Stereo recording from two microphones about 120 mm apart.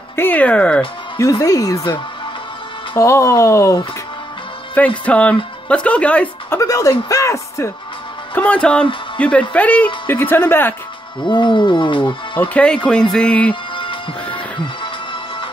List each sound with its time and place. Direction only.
0.1 s speech: 15° left (ahead or behind)
1.2 s speech: 30° left (ahead or behind)
3.0 s speech: 25° left (ahead or behind)
4.7 s speech: 10° left (ahead or behind)
6.6 s speech: 30° left (ahead or behind)
8.4 s speech: 10° left (ahead or behind)
11.1 s music: 40° left (ahead or behind)
12.4 s speech: 10° left (ahead or behind)
13.7 s music: 45° left (ahead or behind)